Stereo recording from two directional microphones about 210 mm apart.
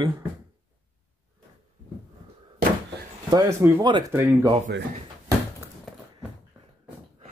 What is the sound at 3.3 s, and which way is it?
Speech, 20° right (ahead or behind).